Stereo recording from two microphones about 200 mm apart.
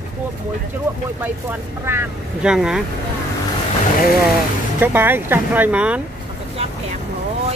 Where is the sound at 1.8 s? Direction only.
10° right (ahead or behind).